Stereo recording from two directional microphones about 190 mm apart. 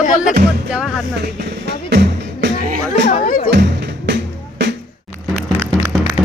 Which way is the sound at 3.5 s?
60° right (ahead or behind).